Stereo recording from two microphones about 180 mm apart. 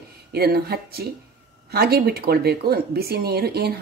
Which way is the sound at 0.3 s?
60° right (ahead or behind).